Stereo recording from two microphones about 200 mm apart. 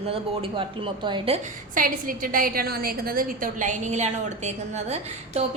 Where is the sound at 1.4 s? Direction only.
40° right (ahead or behind).